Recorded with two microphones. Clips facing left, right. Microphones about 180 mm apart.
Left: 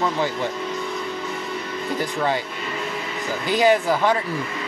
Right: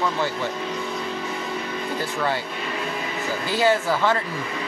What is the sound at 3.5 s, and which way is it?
Speech, 15° left (ahead or behind).